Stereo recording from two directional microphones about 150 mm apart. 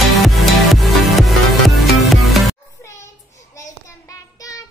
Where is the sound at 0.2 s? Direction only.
Centre (ahead or behind).